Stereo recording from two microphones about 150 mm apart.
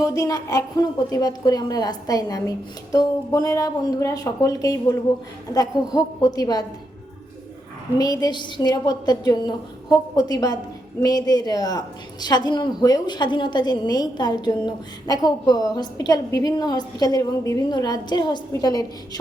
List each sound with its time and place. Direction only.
0.0 s a woman's voice: 25° left (ahead or behind)
7.9 s a woman's voice: 25° left (ahead or behind)